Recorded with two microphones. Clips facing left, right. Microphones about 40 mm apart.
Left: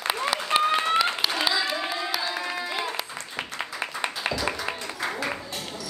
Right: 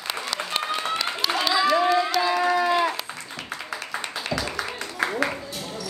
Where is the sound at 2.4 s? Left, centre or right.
Right.